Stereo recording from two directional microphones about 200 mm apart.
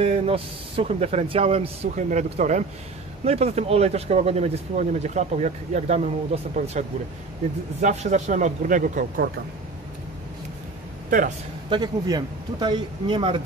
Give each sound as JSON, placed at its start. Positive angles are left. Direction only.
{"t": 0.0, "sound": "speech", "side_deg": -30}
{"t": 7.8, "sound": "speech", "side_deg": -35}
{"t": 11.1, "sound": "speech", "side_deg": -40}
{"t": 11.7, "sound": "speech", "side_deg": -20}